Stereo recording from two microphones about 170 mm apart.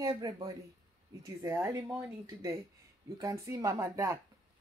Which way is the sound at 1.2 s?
15° right (ahead or behind).